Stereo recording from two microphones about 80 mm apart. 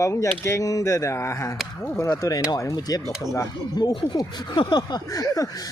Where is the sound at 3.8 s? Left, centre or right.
Left.